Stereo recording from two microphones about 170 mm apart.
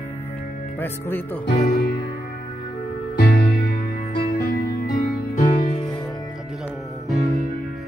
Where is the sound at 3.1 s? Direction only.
85° left.